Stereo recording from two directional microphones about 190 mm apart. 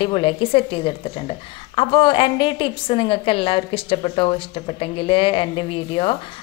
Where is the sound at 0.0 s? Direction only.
25° left (ahead or behind).